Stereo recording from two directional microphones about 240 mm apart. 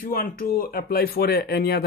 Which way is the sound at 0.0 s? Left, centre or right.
Left.